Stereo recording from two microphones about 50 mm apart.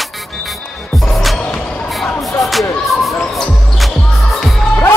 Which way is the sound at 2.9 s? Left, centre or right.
Centre.